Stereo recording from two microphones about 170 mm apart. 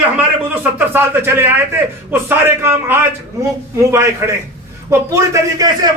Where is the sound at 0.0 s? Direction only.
10° right (ahead or behind).